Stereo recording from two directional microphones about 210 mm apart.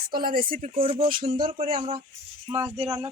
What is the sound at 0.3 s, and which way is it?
Speech, 45° right (ahead or behind).